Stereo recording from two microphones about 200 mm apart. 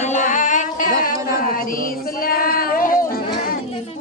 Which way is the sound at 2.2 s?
45° left (ahead or behind).